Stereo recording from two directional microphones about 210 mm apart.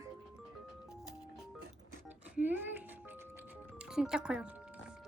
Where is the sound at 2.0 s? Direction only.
10° right (ahead or behind).